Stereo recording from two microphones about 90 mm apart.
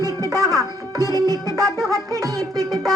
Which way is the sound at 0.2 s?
40° right (ahead or behind).